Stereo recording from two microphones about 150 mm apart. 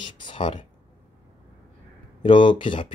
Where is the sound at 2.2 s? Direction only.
35° left (ahead or behind).